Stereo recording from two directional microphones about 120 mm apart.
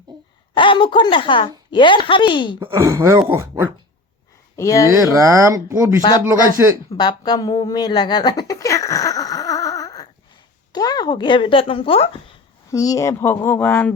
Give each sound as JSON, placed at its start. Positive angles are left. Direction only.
{"t": 0.5, "sound": "a woman's voice", "side_deg": 45}
{"t": 2.7, "sound": "speech", "side_deg": -25}
{"t": 4.5, "sound": "speech", "side_deg": 25}
{"t": 5.1, "sound": "speech", "side_deg": -25}
{"t": 6.9, "sound": "a sound", "side_deg": 35}
{"t": 10.7, "sound": "speech", "side_deg": 35}
{"t": 12.7, "sound": "speech", "side_deg": 30}